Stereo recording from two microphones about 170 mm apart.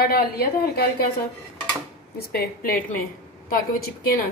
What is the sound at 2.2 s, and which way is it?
Speech, 60° left (ahead or behind).